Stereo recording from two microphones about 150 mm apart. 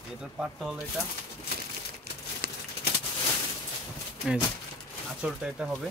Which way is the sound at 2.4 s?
90° right.